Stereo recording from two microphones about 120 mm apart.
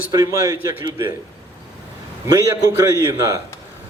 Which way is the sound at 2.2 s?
25° right (ahead or behind).